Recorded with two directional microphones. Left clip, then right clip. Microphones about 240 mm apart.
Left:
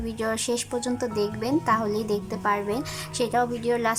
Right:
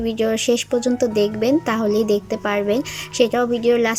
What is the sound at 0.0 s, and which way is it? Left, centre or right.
Speech, centre.